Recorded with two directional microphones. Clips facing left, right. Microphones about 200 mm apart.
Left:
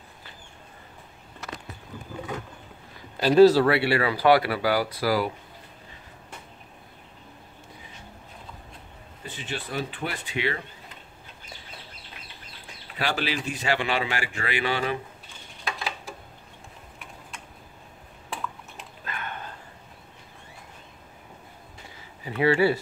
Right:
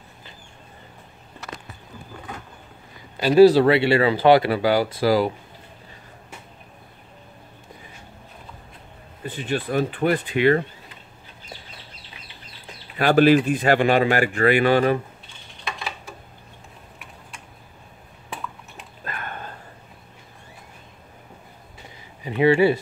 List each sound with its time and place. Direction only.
3.2 s a man's voice: centre (ahead or behind)
3.4 s speech: 20° right (ahead or behind)
9.2 s speech: 55° right (ahead or behind)
13.0 s speech: 50° right (ahead or behind)
19.0 s a sound: 45° right (ahead or behind)
22.2 s speech: 20° right (ahead or behind)